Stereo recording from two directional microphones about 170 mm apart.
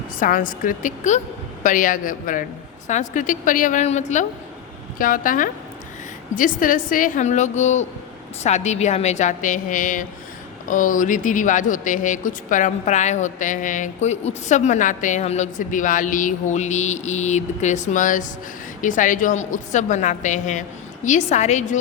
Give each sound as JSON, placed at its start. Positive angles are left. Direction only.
{"t": 0.2, "sound": "speech", "side_deg": 55}
{"t": 4.9, "sound": "speech", "side_deg": 55}